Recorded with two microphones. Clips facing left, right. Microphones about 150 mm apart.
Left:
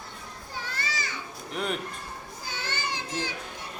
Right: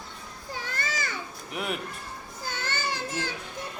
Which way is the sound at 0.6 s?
50° right (ahead or behind).